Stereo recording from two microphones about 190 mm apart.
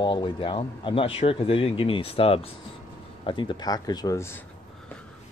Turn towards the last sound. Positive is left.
turn(degrees=15)  # may be behind; listen again after turning